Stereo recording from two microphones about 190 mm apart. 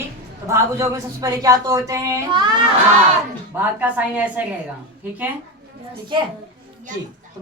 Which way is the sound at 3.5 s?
10° right (ahead or behind).